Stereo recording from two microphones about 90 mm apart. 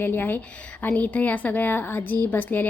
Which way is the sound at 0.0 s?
20° left (ahead or behind).